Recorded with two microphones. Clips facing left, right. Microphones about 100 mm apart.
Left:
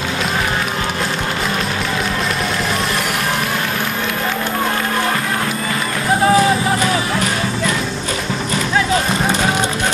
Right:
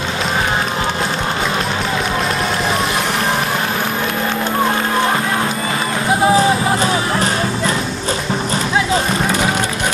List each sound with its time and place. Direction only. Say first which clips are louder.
6.3 s music: even; 30° right (ahead or behind)